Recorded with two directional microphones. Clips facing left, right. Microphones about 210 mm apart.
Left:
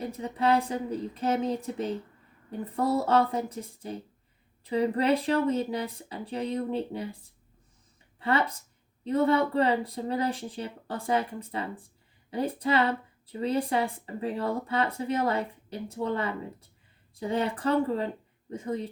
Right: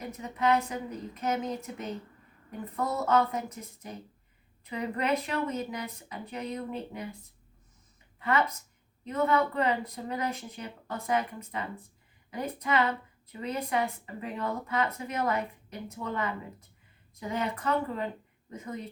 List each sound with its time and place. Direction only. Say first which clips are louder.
0.0 s speech: left 2 dB; 30° left (ahead or behind)
8.2 s speech: left 1 dB; 30° left (ahead or behind)